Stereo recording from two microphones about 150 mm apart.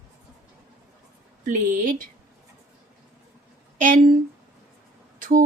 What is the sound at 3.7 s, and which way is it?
Speech, 60° right (ahead or behind).